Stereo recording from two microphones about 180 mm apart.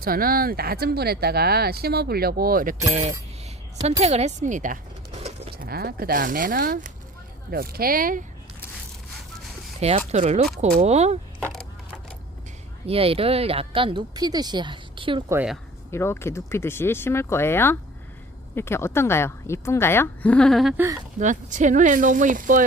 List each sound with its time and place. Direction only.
0.0 s speech: 55° right (ahead or behind)
4.0 s speech: 35° right (ahead or behind)
5.2 s bird: 35° right (ahead or behind)
5.6 s speech: 55° right (ahead or behind)
10.1 s speech: 40° right (ahead or behind)
12.8 s speech: 30° right (ahead or behind)
15.9 s a woman's voice: 15° left (ahead or behind)
20.7 s speech: 15° right (ahead or behind)
21.2 s speech: 45° right (ahead or behind)